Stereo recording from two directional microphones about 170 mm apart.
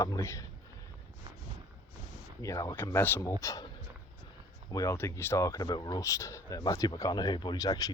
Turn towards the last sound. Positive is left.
turn(degrees=20)  # may be behind; listen again after turning